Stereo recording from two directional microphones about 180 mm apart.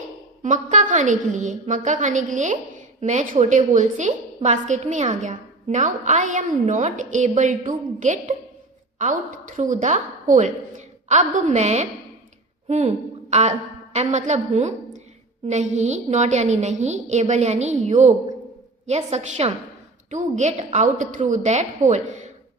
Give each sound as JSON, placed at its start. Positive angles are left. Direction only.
{"t": 0.4, "sound": "a woman's voice", "side_deg": -45}